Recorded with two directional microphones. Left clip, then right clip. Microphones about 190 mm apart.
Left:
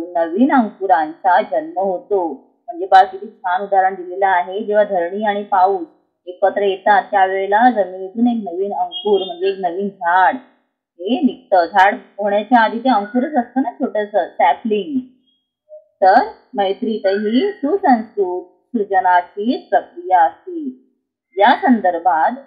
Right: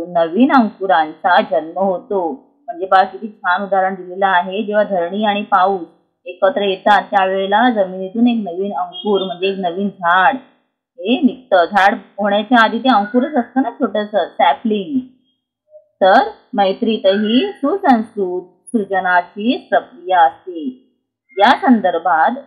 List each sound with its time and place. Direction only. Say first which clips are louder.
0.1 s a woman's voice: right 2 dB; 20° right (ahead or behind)
16.0 s a woman's voice: right 1 dB; 20° right (ahead or behind)
21.4 s a woman's voice: right 1 dB; 15° right (ahead or behind)